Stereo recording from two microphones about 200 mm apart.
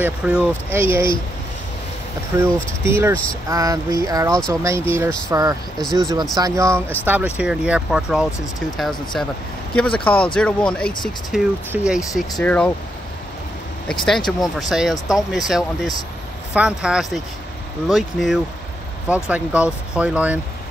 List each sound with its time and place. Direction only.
0.0 s speech: 5° right (ahead or behind)
2.3 s speech: 15° right (ahead or behind)
5.8 s speech: centre (ahead or behind)
6.3 s speech: 15° right (ahead or behind)
12.4 s speech: 5° left (ahead or behind)
14.0 s speech: centre (ahead or behind)